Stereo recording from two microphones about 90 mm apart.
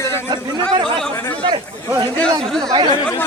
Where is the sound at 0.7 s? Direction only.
65° right (ahead or behind).